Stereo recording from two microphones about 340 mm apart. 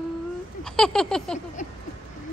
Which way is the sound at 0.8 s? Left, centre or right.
Centre.